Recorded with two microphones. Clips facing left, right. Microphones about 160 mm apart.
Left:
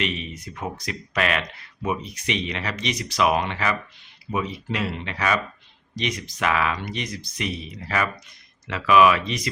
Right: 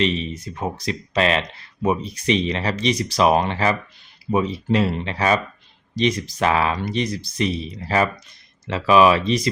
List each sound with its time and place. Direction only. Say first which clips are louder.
0.0 s speech: right 7 dB; 30° right (ahead or behind)